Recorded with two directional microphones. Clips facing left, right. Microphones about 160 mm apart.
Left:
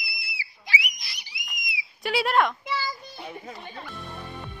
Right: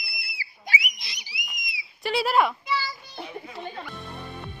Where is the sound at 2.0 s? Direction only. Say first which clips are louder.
Right 1 dB; centre (ahead or behind).